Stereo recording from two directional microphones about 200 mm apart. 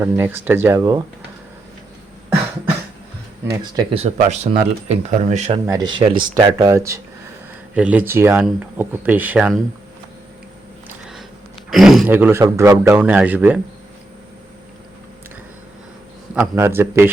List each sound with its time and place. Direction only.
0.0 s speech: 10° right (ahead or behind)
3.5 s speech: 20° right (ahead or behind)
5.6 s speech: 20° right (ahead or behind)
10.8 s a sound: centre (ahead or behind)
11.7 s speech: centre (ahead or behind)
16.3 s speech: 10° right (ahead or behind)